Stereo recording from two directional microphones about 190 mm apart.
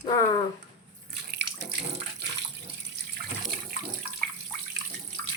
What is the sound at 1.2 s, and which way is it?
Water, 65° right (ahead or behind).